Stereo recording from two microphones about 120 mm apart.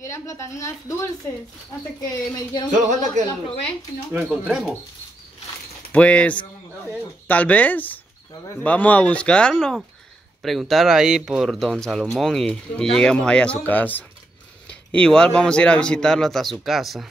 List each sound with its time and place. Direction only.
0.0 s a woman's voice: 25° left (ahead or behind)
2.7 s speech: 90° right
4.3 s speech: centre (ahead or behind)
5.9 s mechanisms: 10° left (ahead or behind)
7.2 s speech: 15° left (ahead or behind)